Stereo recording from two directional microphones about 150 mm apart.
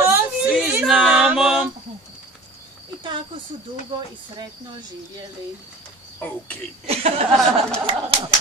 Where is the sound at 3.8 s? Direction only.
30° right (ahead or behind).